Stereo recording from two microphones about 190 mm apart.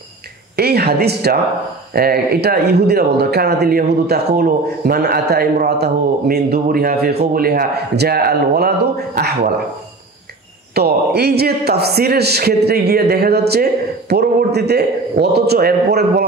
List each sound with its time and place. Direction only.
0.6 s a man's voice: 55° right (ahead or behind)
10.7 s a man's voice: 55° right (ahead or behind)